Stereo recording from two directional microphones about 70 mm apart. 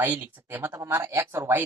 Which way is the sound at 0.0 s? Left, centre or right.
Right.